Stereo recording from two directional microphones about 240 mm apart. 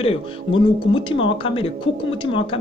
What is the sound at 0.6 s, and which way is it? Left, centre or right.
Speech, left.